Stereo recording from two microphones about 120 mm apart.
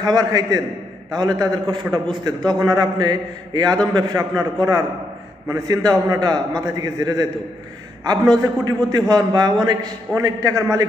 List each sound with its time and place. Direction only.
0.0 s a man's voice: 30° right (ahead or behind)
5.9 s a man's voice: 30° right (ahead or behind)